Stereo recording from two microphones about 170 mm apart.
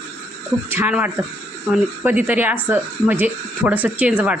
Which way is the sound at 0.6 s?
10° right (ahead or behind).